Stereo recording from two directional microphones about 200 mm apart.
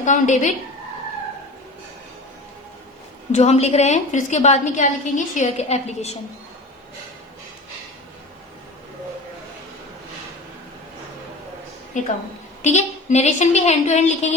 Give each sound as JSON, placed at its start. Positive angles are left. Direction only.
{"t": 0.0, "sound": "a woman's voice", "side_deg": 35}
{"t": 3.3, "sound": "a woman's voice", "side_deg": 35}
{"t": 11.9, "sound": "a woman's voice", "side_deg": 40}